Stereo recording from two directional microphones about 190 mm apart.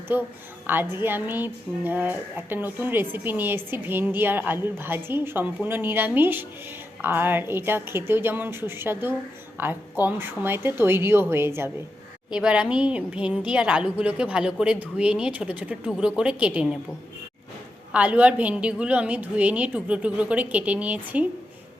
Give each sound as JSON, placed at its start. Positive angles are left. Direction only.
{"t": 0.1, "sound": "a woman's voice", "side_deg": -10}
{"t": 17.9, "sound": "a woman's voice", "side_deg": -5}